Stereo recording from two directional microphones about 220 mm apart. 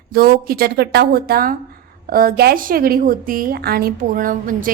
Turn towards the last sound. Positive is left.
turn(degrees=-40)  # may be behind; listen again after turning